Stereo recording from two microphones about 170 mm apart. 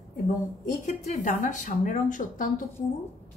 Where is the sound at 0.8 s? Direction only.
45° left (ahead or behind).